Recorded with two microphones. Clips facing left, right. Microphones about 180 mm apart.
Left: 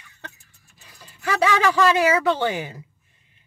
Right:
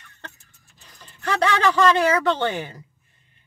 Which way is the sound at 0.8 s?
10° left (ahead or behind).